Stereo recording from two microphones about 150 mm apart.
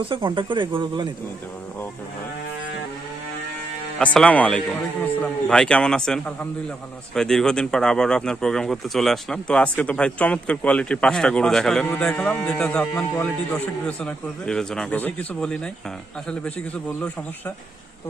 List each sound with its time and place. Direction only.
0.3 s speech: 30° right (ahead or behind)
3.9 s speech: 5° left (ahead or behind)